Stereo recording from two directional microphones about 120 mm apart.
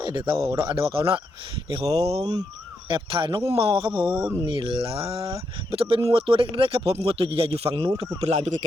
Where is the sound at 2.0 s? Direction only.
60° right (ahead or behind).